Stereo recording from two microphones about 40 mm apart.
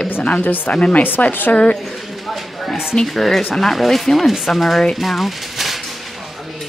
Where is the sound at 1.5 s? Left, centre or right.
Left.